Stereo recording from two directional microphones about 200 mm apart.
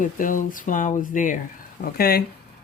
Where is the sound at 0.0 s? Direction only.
40° left (ahead or behind).